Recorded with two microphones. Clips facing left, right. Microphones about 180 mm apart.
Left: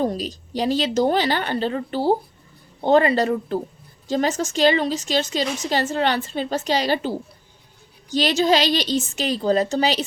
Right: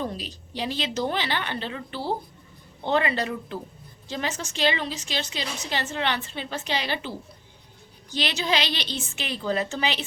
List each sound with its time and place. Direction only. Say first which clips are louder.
0.0 s a woman's voice: left 8 dB; 40° left (ahead or behind)
8.1 s a woman's voice: left 8 dB; 45° left (ahead or behind)